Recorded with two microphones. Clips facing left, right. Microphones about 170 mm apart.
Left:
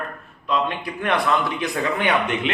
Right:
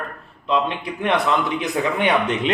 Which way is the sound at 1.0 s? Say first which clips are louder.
Right 1 dB; 20° right (ahead or behind).